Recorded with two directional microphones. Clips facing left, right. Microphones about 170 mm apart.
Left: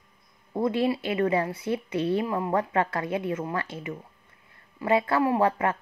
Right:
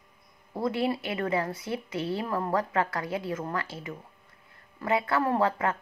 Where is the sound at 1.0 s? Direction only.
25° left (ahead or behind).